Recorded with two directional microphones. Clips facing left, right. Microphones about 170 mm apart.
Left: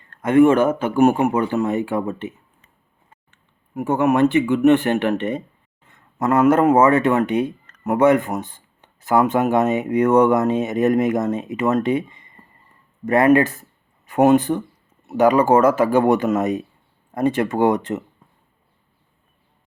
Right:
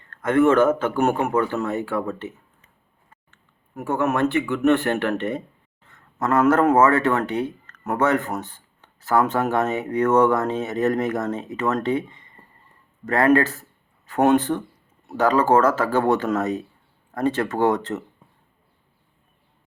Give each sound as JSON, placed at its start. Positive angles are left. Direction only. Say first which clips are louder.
{"t": 0.1, "sound": "speech", "louder": "left 4 dB", "side_deg": 15}
{"t": 3.8, "sound": "speech", "louder": "left 5 dB", "side_deg": 15}